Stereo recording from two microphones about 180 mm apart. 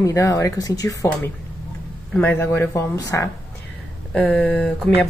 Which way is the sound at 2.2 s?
10° left (ahead or behind).